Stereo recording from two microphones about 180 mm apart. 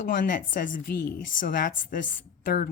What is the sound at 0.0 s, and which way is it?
A woman's voice, 50° left (ahead or behind).